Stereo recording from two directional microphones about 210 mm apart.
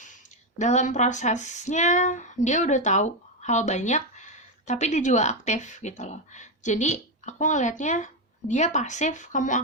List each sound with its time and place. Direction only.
0.6 s speech: 35° left (ahead or behind)